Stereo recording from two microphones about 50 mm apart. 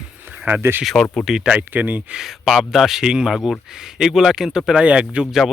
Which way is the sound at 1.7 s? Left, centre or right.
Right.